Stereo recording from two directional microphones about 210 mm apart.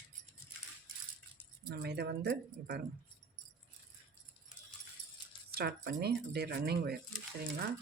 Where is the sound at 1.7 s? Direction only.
50° right (ahead or behind).